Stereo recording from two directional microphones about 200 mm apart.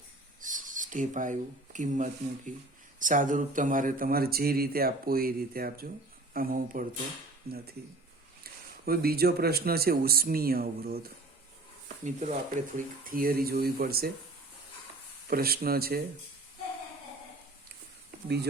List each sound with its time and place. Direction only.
0.4 s speech: 40° right (ahead or behind)
8.9 s speech: 50° right (ahead or behind)
12.0 s speech: 35° right (ahead or behind)
15.3 s speech: 50° right (ahead or behind)